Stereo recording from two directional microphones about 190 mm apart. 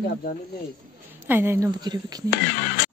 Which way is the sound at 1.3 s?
10° right (ahead or behind).